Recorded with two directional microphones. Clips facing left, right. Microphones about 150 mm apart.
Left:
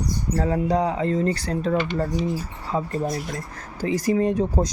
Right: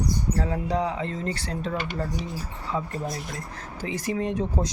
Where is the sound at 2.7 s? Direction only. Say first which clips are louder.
Left 5 dB; 35° left (ahead or behind).